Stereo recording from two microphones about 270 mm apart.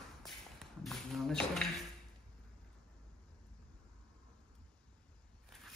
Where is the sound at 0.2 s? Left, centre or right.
Centre.